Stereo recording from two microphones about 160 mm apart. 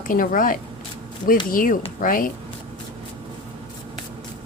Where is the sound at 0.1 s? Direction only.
60° left (ahead or behind).